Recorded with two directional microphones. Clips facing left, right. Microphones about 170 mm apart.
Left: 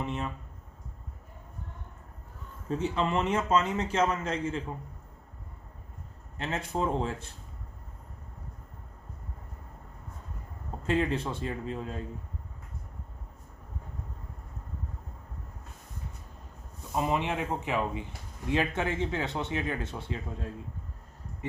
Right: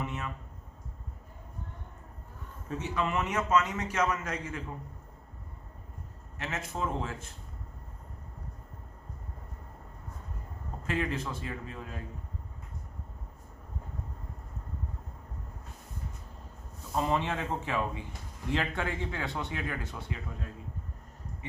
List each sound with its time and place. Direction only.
0.0 s speech: 30° left (ahead or behind)
2.6 s speech: 30° left (ahead or behind)
6.4 s a man's voice: 30° left (ahead or behind)
10.8 s speech: 30° left (ahead or behind)
16.9 s speech: 15° left (ahead or behind)